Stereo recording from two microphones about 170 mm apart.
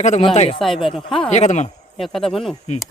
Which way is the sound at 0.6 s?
Centre (ahead or behind).